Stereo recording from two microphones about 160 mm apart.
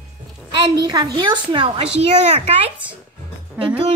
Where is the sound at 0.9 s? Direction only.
30° right (ahead or behind).